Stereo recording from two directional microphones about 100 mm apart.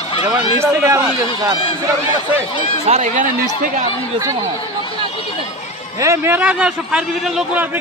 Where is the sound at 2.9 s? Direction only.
90° right.